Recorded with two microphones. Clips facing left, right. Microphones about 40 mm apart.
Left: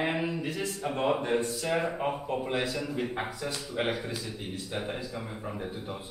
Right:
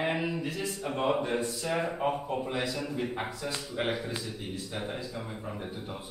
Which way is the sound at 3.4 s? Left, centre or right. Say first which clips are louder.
Left 1 dB; centre.